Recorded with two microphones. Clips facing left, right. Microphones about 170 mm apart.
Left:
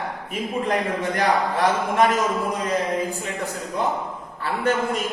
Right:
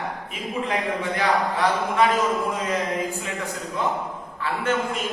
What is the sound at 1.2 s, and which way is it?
Speech, 45° left (ahead or behind).